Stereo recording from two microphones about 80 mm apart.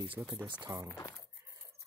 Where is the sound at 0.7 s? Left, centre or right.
Right.